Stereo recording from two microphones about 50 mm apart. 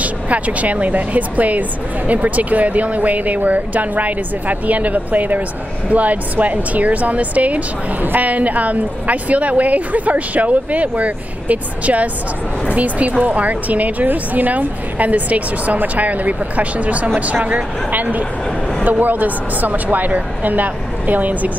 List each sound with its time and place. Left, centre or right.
0.0 s speech: right